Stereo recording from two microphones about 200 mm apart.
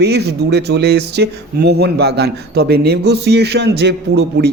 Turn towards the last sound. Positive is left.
turn(degrees=-55)  # may be behind; listen again after turning